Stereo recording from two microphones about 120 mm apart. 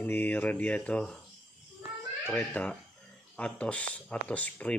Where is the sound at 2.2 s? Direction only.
15° left (ahead or behind).